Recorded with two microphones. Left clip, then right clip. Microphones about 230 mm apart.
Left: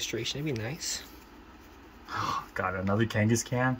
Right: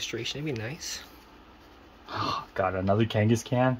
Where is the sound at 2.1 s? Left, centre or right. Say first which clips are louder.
Right 1 dB; right.